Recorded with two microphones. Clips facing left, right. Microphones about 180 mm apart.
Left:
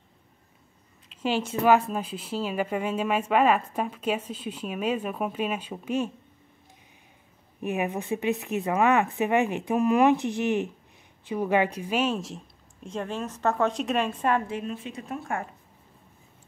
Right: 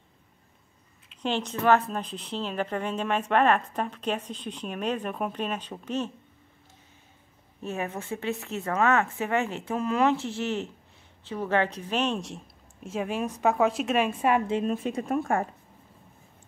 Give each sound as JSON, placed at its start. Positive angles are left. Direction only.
{"t": 1.2, "sound": "a woman's voice", "side_deg": 5}
{"t": 7.6, "sound": "a woman's voice", "side_deg": 15}
{"t": 12.8, "sound": "a woman's voice", "side_deg": -10}
{"t": 14.7, "sound": "speech", "side_deg": -45}